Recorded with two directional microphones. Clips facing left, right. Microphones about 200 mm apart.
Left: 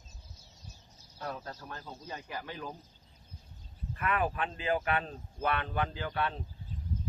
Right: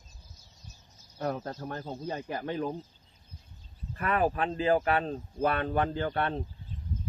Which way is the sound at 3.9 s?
35° right (ahead or behind).